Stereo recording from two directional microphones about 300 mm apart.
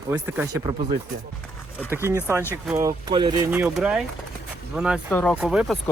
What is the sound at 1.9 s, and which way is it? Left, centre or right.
Speech, centre.